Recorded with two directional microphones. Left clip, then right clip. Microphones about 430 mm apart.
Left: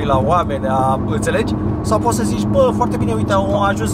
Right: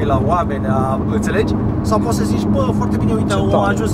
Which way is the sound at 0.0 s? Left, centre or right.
Left.